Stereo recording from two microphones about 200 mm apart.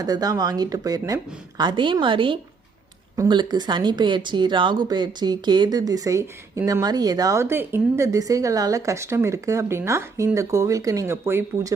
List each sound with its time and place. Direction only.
0.0 s a woman's voice: 20° right (ahead or behind)